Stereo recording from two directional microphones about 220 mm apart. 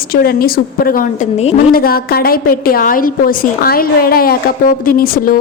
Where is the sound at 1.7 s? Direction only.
45° left (ahead or behind).